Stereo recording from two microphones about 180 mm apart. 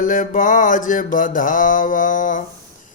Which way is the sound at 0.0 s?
50° left (ahead or behind).